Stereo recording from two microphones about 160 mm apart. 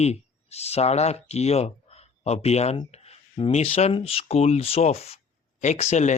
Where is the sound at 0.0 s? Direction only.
40° left (ahead or behind).